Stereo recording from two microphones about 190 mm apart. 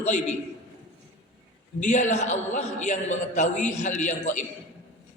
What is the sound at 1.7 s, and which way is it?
A man's voice, 40° left (ahead or behind).